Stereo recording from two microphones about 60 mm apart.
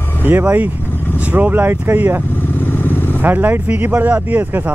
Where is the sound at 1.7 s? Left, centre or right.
Right.